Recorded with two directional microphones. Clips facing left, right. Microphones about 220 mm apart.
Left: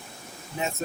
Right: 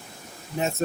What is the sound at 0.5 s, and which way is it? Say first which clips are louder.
Speech: right 4 dB; 45° right (ahead or behind).